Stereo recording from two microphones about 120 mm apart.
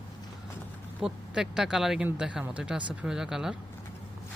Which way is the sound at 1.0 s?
5° right (ahead or behind).